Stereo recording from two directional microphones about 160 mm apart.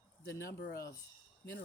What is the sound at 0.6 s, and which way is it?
Speech, 70° left (ahead or behind).